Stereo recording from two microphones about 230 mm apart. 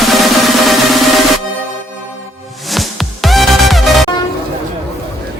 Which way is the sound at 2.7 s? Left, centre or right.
Centre.